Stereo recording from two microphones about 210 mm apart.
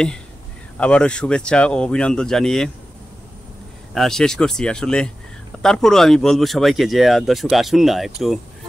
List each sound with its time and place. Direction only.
0.7 s speech: 5° left (ahead or behind)
3.9 s speech: centre (ahead or behind)